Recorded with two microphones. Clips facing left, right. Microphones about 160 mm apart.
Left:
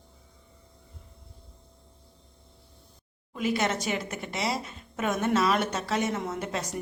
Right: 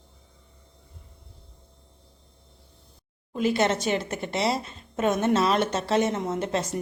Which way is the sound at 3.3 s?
30° right (ahead or behind).